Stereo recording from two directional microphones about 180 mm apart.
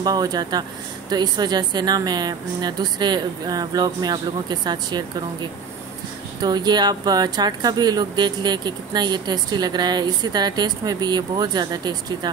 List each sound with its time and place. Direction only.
0.0 s speech: 20° right (ahead or behind)
6.4 s speech: 25° right (ahead or behind)